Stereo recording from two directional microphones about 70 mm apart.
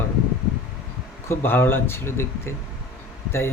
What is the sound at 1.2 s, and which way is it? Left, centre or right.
Speech, left.